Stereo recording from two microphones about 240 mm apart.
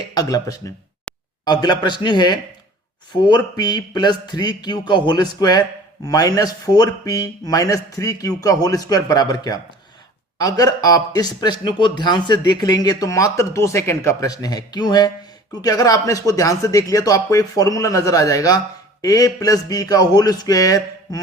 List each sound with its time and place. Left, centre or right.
0.1 s a man's voice: centre